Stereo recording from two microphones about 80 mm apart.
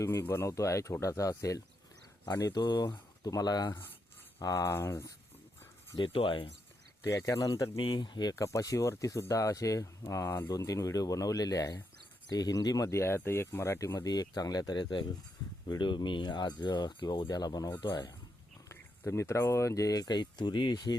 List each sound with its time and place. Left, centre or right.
0.0 s speech: left
2.5 s speech: left
4.4 s speech: left
6.0 s speech: left
7.0 s speech: left
7.8 s speech: left
8.4 s speech: left
18.7 s speech: left
19.9 s speech: left